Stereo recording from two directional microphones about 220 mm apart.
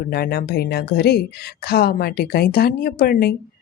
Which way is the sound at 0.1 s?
45° left (ahead or behind).